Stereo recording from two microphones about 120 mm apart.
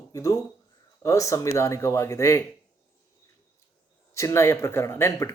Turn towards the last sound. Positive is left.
turn(degrees=20)  # may be behind; listen again after turning